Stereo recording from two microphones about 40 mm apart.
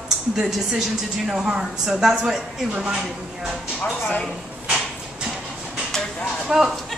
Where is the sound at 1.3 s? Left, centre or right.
Right.